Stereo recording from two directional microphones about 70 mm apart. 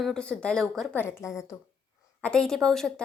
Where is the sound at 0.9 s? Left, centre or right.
Left.